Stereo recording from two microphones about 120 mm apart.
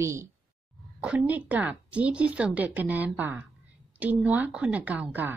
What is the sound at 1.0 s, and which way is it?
A woman's voice, 10° right (ahead or behind).